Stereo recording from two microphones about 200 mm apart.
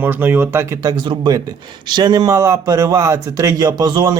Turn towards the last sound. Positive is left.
turn(degrees=-20)  # may be behind; listen again after turning